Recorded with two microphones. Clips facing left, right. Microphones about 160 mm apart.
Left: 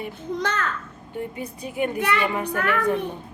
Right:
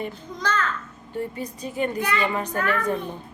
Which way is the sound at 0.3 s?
65° left (ahead or behind).